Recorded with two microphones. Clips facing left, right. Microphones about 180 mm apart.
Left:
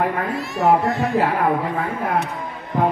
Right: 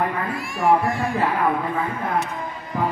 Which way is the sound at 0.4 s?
20° left (ahead or behind).